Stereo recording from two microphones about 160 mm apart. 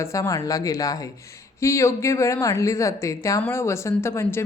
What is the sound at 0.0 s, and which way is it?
A woman's voice, 20° left (ahead or behind).